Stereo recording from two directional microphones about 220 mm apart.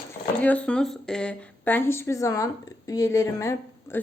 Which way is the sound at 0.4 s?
5° left (ahead or behind).